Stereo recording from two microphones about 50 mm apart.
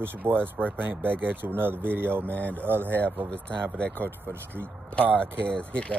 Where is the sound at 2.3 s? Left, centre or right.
Left.